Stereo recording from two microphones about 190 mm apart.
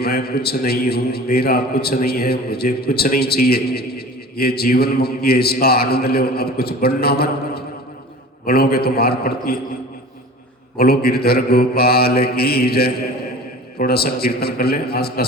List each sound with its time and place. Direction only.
0.0 s a man's voice: 55° left (ahead or behind)
10.8 s a man's voice: 55° left (ahead or behind)